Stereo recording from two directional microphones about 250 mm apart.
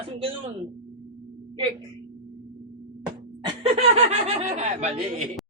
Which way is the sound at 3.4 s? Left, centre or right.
Right.